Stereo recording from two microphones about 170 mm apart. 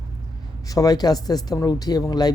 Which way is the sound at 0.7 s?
20° left (ahead or behind).